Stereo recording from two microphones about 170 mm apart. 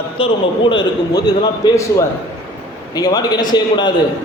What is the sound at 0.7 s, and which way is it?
A man's voice, 25° left (ahead or behind).